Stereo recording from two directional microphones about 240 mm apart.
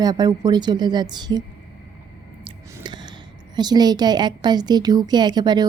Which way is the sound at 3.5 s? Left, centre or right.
Centre.